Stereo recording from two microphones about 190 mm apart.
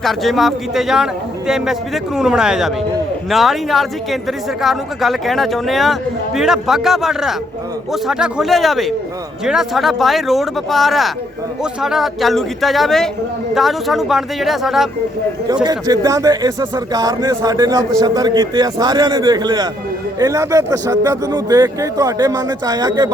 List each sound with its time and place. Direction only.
0.0 s speech: centre (ahead or behind)
15.6 s speech: 20° right (ahead or behind)